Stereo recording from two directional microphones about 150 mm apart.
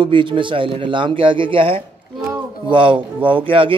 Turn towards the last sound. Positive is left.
turn(degrees=-35)  # may be behind; listen again after turning